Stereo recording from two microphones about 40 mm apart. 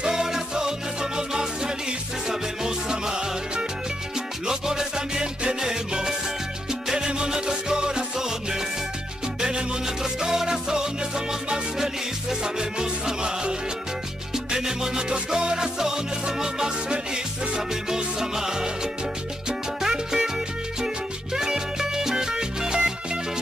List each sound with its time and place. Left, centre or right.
0.0 s music: centre
19.8 s music: centre